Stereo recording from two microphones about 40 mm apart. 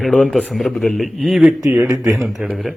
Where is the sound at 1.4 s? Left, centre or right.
Right.